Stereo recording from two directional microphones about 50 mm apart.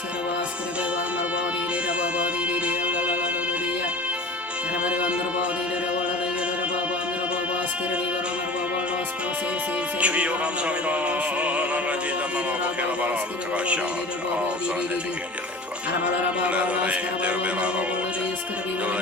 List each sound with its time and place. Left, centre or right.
2.0 s music: right
4.8 s music: right
10.0 s music: right
16.4 s music: right